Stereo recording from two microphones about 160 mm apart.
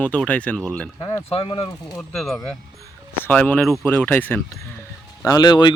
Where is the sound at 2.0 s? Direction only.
Centre (ahead or behind).